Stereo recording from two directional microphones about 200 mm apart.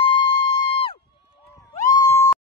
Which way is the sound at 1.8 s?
15° left (ahead or behind).